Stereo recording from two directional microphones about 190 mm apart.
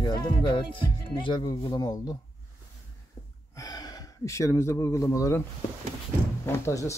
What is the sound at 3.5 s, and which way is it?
Speech, 20° left (ahead or behind).